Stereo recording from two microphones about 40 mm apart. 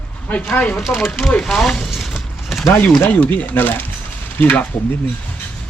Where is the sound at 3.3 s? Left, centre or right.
Left.